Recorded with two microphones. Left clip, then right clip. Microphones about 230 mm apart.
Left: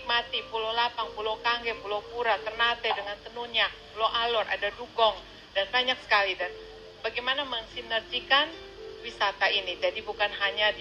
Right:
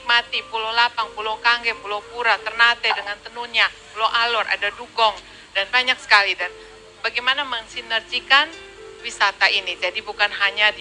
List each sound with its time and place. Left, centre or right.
0.2 s speech: centre